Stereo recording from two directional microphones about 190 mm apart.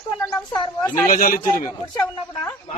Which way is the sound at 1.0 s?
45° left (ahead or behind).